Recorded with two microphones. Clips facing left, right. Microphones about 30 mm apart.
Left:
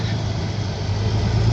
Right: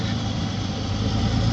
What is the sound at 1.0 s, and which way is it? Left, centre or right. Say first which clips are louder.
Vehicle: even; right.